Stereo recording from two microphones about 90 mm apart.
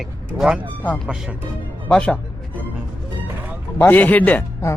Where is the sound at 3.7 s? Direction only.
20° left (ahead or behind).